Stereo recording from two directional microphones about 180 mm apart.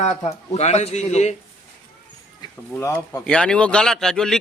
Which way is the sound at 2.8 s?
10° left (ahead or behind).